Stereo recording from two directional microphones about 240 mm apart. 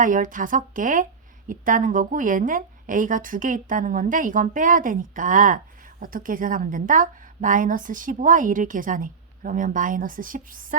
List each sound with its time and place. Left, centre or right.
0.0 s a woman's voice: right